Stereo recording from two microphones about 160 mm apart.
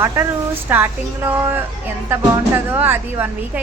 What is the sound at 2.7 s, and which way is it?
Speech, 15° right (ahead or behind).